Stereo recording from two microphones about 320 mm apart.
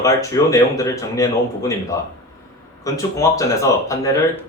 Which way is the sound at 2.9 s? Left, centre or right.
Centre.